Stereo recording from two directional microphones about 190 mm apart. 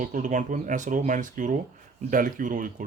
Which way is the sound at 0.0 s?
40° right (ahead or behind).